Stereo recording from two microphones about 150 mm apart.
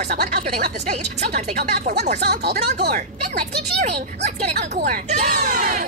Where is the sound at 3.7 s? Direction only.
50° right (ahead or behind).